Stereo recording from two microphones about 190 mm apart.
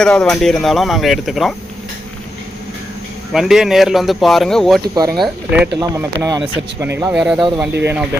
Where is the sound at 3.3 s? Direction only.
Centre (ahead or behind).